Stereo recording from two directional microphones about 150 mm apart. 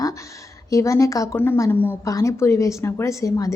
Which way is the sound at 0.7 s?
20° left (ahead or behind).